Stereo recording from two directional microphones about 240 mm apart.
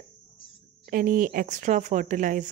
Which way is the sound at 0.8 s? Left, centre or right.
Right.